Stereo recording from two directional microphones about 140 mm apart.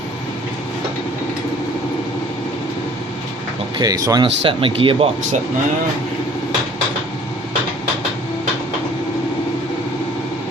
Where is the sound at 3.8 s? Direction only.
25° right (ahead or behind).